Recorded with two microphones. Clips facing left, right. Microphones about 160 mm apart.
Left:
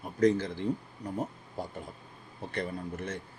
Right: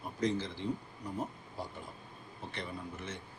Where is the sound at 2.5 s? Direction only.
50° left (ahead or behind).